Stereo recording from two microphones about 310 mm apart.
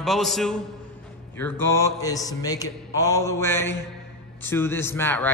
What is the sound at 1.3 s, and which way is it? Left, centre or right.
Music, centre.